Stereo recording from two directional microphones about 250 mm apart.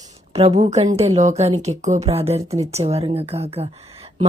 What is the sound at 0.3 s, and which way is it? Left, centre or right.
A woman's voice, right.